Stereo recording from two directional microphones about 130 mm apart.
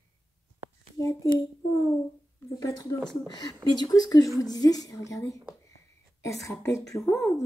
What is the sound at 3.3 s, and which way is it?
A woman's voice, 30° left (ahead or behind).